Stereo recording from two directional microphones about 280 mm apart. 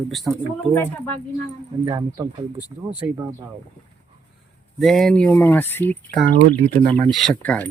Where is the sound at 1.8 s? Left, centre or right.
Centre.